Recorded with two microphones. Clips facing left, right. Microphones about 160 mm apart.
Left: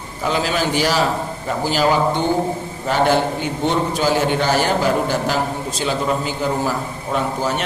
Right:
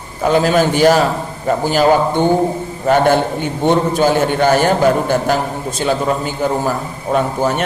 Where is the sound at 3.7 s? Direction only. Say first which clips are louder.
Right 6 dB; 50° right (ahead or behind).